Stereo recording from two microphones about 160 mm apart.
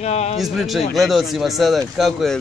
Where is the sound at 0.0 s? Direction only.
40° left (ahead or behind).